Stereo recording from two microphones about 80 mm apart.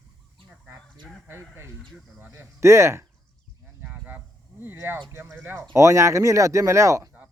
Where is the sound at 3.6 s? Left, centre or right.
Right.